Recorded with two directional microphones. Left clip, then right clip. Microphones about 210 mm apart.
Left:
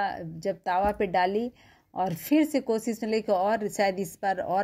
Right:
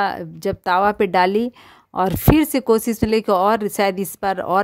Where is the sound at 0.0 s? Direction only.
35° right (ahead or behind).